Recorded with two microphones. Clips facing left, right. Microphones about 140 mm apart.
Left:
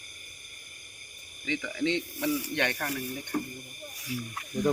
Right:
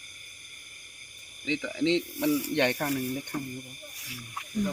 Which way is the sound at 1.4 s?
20° right (ahead or behind).